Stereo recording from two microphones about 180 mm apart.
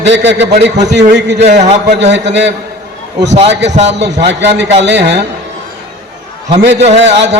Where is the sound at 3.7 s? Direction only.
40° right (ahead or behind).